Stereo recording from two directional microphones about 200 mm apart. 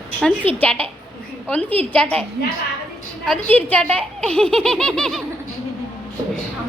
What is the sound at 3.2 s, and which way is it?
Speech, 5° left (ahead or behind).